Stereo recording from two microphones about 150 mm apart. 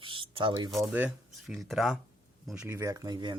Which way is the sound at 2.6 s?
20° right (ahead or behind).